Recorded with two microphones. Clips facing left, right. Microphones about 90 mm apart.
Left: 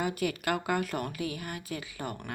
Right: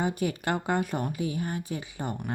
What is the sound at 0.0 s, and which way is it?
Speech, 25° right (ahead or behind).